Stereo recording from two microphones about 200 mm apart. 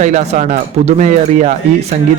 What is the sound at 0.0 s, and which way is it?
A man's voice, 35° right (ahead or behind).